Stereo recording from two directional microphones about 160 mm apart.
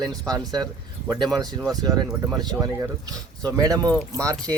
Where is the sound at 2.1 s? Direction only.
5° right (ahead or behind).